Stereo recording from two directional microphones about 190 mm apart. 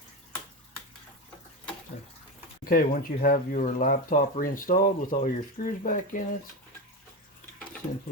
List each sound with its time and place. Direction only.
2.6 s speech: 50° left (ahead or behind)